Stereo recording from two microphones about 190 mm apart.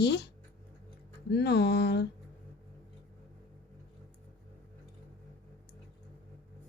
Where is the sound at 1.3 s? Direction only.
60° left (ahead or behind).